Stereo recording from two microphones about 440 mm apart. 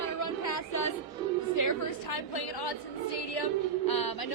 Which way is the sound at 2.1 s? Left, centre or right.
Left.